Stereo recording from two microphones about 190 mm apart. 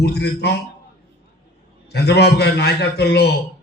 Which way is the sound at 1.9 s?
60° left (ahead or behind).